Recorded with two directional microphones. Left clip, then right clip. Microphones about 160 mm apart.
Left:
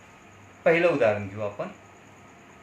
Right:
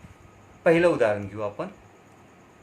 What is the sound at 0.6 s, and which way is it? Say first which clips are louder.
Speech: right 1 dB; 55° right (ahead or behind).